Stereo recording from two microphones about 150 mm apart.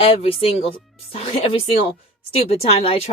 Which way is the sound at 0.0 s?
40° left (ahead or behind).